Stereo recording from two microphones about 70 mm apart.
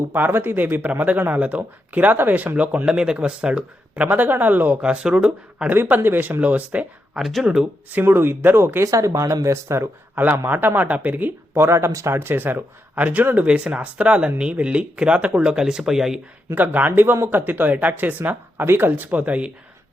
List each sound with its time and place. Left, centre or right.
0.1 s speech: right
4.8 s speech: centre
5.6 s speech: right
7.2 s speech: centre
7.9 s speech: right
8.9 s speech: right
10.2 s speech: right
11.5 s speech: right
12.1 s speech: right; by 16.2 s centre
16.6 s speech: right